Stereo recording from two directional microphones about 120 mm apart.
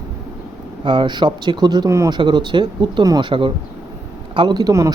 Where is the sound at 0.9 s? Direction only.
40° right (ahead or behind).